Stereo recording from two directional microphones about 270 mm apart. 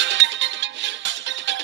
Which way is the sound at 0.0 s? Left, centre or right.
Right.